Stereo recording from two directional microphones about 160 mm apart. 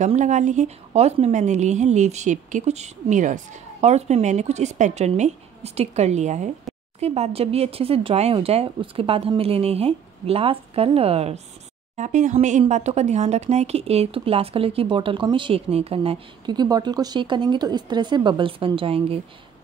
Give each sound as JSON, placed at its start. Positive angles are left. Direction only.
{"t": 0.0, "sound": "a woman's voice", "side_deg": -50}